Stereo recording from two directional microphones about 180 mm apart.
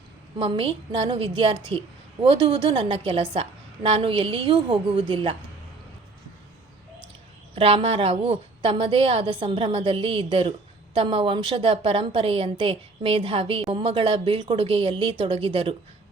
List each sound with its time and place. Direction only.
0.3 s a woman's voice: 30° right (ahead or behind)
7.5 s a woman's voice: 30° right (ahead or behind)